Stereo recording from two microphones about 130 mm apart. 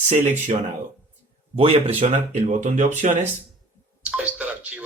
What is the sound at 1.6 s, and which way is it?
Speech, 45° right (ahead or behind).